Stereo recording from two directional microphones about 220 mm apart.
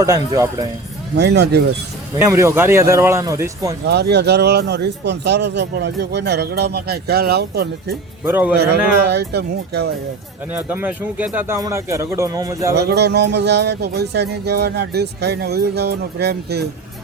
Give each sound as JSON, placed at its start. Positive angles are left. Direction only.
{"t": 0.0, "sound": "speech", "side_deg": -15}
{"t": 1.1, "sound": "speech", "side_deg": -50}
{"t": 2.1, "sound": "speech", "side_deg": -15}
{"t": 3.8, "sound": "speech", "side_deg": -50}
{"t": 8.2, "sound": "speech", "side_deg": -10}
{"t": 8.5, "sound": "speech", "side_deg": -50}
{"t": 10.6, "sound": "speech", "side_deg": -5}
{"t": 12.7, "sound": "speech", "side_deg": -50}